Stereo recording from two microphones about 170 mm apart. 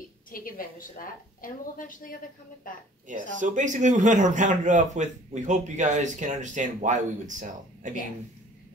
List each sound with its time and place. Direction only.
0.3 s a woman's voice: 55° left (ahead or behind)
3.1 s a man's voice: 50° right (ahead or behind)